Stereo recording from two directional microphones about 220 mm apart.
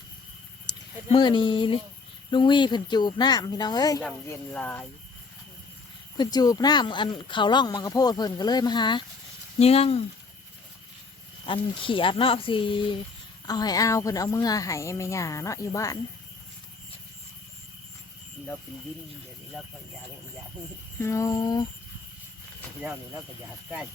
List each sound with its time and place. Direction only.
1.1 s a woman's voice: 20° left (ahead or behind)
6.1 s speech: 15° left (ahead or behind)
11.4 s a woman's voice: 20° left (ahead or behind)
19.6 s speech: centre (ahead or behind)
21.0 s a woman's voice: 15° left (ahead or behind)